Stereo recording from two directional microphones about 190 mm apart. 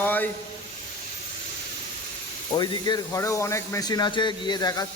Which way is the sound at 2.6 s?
20° left (ahead or behind).